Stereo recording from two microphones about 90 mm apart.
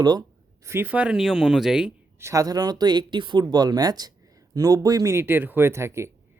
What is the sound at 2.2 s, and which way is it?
Speech, 30° right (ahead or behind).